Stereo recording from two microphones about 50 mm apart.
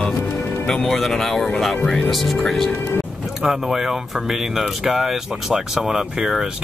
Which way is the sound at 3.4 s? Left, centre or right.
Centre.